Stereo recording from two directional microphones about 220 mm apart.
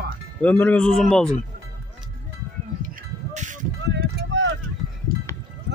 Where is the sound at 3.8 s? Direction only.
50° right (ahead or behind).